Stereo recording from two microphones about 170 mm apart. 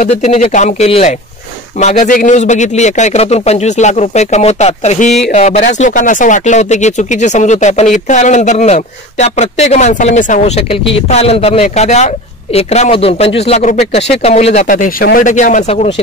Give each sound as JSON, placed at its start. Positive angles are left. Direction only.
{"t": 0.0, "sound": "a man's voice", "side_deg": 40}